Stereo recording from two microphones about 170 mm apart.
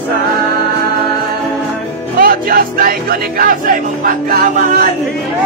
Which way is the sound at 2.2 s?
60° right (ahead or behind).